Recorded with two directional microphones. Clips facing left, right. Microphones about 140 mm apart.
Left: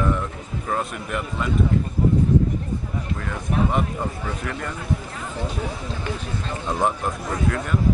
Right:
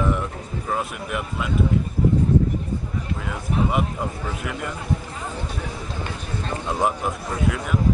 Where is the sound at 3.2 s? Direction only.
5° right (ahead or behind).